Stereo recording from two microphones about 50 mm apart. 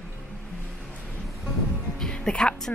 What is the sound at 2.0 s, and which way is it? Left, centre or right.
Music, centre.